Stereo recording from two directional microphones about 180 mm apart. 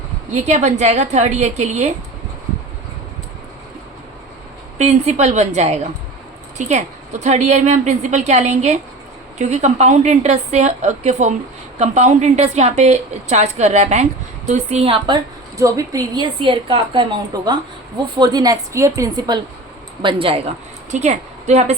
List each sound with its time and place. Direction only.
0.4 s a woman's voice: 40° right (ahead or behind)
4.8 s a woman's voice: 40° right (ahead or behind)
20.9 s a woman's voice: 40° right (ahead or behind)